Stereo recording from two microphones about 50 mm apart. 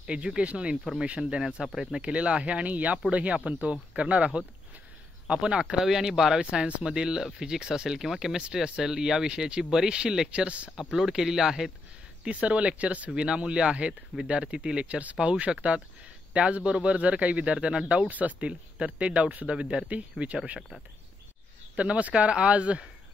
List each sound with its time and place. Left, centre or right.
0.0 s speech: centre
1.8 s speech: centre
10.3 s speech: right
10.8 s speech: centre
12.3 s speech: right
21.7 s speech: right